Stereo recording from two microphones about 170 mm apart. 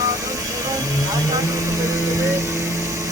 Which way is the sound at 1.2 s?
15° right (ahead or behind).